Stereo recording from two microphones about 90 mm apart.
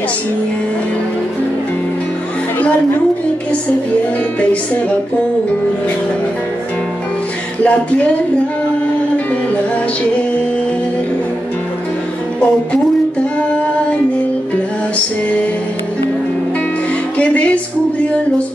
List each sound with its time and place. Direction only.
4.4 s music: 15° left (ahead or behind)
7.6 s music: 15° left (ahead or behind)
17.2 s music: 15° left (ahead or behind)